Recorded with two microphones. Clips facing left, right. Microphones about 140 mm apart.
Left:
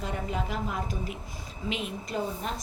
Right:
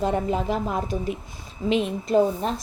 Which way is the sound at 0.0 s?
30° right (ahead or behind).